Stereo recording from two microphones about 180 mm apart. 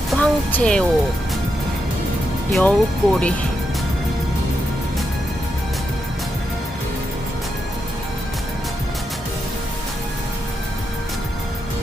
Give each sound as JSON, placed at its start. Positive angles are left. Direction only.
{"t": 0.1, "sound": "music", "side_deg": 5}
{"t": 2.5, "sound": "speech", "side_deg": 5}